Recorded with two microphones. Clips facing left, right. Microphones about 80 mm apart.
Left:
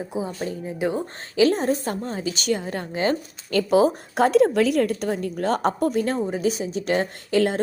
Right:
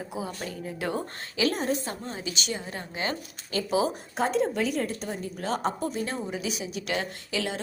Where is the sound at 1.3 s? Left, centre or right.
Left.